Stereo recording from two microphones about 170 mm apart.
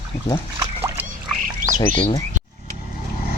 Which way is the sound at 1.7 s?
30° left (ahead or behind).